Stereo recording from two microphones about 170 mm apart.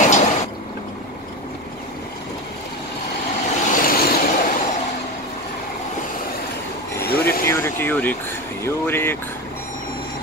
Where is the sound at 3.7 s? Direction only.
55° left (ahead or behind).